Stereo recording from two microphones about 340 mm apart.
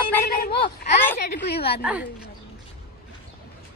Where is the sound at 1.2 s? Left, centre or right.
Left.